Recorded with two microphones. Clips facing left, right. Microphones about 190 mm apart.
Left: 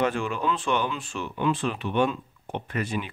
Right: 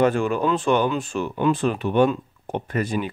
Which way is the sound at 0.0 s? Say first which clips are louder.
Right 6 dB; 45° right (ahead or behind).